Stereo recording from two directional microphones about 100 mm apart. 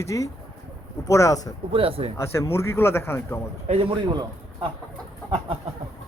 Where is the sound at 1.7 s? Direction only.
70° right (ahead or behind).